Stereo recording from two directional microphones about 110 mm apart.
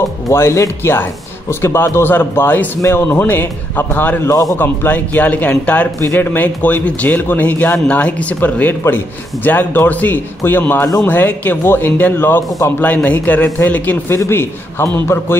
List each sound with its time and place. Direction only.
0.3 s a man's voice: 25° left (ahead or behind)
4.3 s a man's voice: 30° left (ahead or behind)
4.6 s a man's voice: 15° left (ahead or behind)